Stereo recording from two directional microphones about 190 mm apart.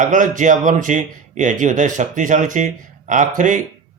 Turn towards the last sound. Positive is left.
turn(degrees=-40)  # may be behind; listen again after turning